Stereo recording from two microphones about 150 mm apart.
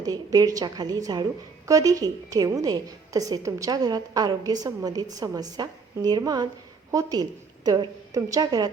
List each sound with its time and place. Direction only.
0.0 s a woman's voice: 25° right (ahead or behind)